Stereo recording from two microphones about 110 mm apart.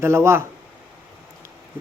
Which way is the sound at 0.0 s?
25° right (ahead or behind).